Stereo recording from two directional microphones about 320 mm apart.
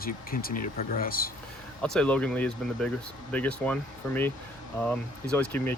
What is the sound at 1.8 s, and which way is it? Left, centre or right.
Speech, centre.